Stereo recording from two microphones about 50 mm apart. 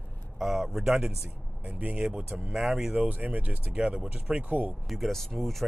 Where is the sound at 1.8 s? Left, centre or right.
Right.